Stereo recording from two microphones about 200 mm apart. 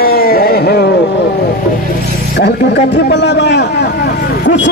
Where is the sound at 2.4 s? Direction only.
60° left (ahead or behind).